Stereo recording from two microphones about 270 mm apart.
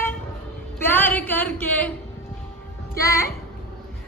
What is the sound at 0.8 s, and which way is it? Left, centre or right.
A woman's voice, centre.